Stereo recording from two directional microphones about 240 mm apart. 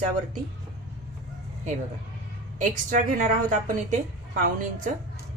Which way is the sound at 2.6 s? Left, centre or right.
Right.